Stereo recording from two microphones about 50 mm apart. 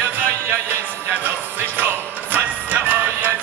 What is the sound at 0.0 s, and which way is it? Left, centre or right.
Music, right.